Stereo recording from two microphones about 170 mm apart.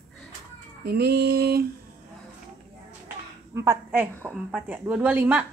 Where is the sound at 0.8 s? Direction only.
70° right (ahead or behind).